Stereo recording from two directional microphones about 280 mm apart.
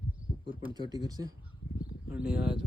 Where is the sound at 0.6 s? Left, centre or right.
Centre.